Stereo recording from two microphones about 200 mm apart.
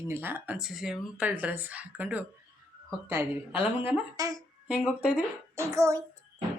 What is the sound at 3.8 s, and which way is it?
Speech, 15° right (ahead or behind).